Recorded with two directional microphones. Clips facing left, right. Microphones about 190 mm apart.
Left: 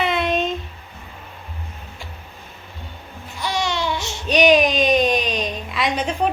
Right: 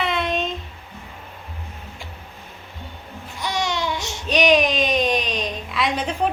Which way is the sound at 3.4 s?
20° right (ahead or behind).